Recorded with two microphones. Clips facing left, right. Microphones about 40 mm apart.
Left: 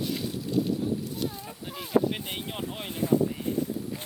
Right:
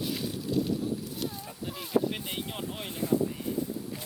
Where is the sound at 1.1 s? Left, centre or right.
Centre.